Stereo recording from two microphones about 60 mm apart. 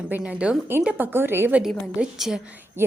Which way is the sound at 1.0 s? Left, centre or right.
Right.